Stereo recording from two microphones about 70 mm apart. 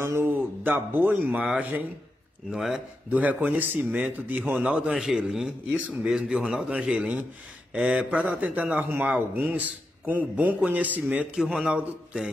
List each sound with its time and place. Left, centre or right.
0.0 s a man's voice: right
2.5 s a man's voice: centre
3.1 s a man's voice: right
11.3 s a man's voice: centre